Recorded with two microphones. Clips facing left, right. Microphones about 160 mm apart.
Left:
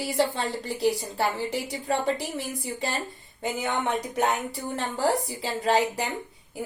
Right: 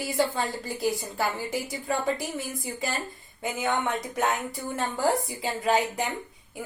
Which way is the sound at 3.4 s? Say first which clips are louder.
Even; 30° left (ahead or behind).